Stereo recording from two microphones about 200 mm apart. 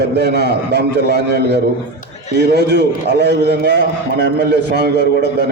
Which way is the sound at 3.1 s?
55° right (ahead or behind).